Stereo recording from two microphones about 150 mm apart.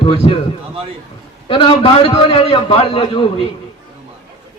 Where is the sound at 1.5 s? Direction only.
35° left (ahead or behind).